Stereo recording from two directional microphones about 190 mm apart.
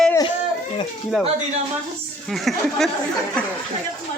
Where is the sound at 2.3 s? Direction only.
Centre (ahead or behind).